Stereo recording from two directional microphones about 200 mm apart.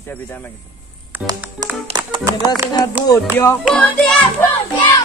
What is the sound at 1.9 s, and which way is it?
Speech, 25° right (ahead or behind).